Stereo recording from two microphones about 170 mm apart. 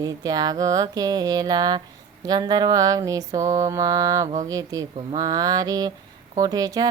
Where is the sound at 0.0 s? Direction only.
20° right (ahead or behind).